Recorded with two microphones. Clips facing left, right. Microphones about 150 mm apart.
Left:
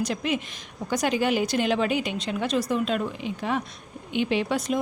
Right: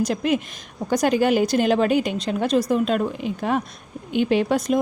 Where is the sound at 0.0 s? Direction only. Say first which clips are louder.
Right 5 dB; 45° right (ahead or behind).